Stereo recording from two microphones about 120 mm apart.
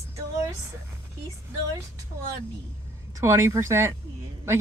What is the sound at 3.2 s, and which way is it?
Speech, 25° right (ahead or behind).